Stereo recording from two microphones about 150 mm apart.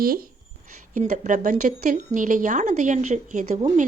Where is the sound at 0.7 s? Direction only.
55° right (ahead or behind).